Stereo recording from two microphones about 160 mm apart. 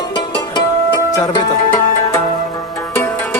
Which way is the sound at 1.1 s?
20° left (ahead or behind).